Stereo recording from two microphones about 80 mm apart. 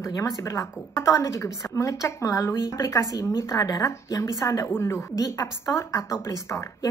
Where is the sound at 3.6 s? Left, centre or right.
Left.